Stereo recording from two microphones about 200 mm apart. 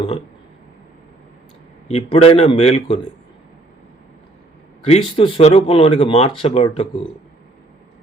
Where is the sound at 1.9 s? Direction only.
30° left (ahead or behind).